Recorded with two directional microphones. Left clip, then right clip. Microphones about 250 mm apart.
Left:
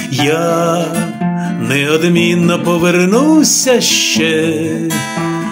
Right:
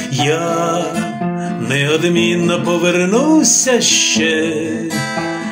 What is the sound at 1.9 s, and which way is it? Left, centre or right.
Music, left.